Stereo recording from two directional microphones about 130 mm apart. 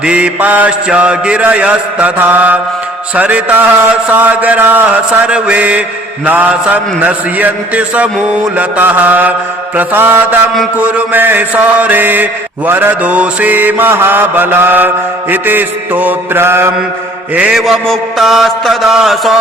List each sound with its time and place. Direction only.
0.0 s mantra: 10° right (ahead or behind)
17.3 s mantra: 5° right (ahead or behind)